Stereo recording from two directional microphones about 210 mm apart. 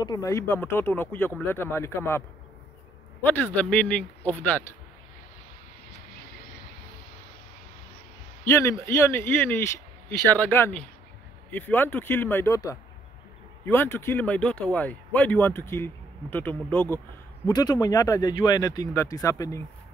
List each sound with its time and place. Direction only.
0.0 s speech: 15° left (ahead or behind)
3.3 s speech: 10° left (ahead or behind)
8.5 s speech: 15° left (ahead or behind)